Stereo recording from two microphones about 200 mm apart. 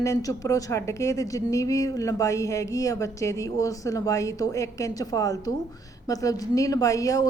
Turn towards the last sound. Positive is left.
turn(degrees=15)  # may be behind; listen again after turning